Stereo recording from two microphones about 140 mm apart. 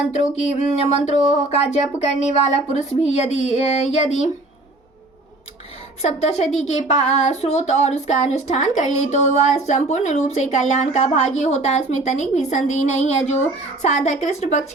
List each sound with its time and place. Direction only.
0.1 s speech: 55° left (ahead or behind)
6.0 s speech: 50° left (ahead or behind)